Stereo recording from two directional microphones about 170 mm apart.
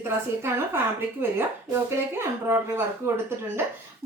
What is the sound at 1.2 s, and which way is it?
Speech, 15° right (ahead or behind).